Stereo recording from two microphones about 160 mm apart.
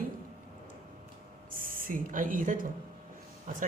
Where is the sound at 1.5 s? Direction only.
60° right (ahead or behind).